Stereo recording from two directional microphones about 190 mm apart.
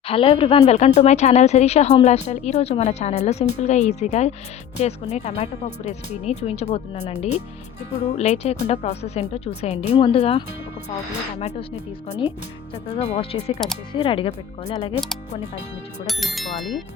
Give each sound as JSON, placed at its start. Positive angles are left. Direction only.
{"t": 0.1, "sound": "speech", "side_deg": 30}
{"t": 12.9, "sound": "speech", "side_deg": 35}
{"t": 16.0, "sound": "speech", "side_deg": 0}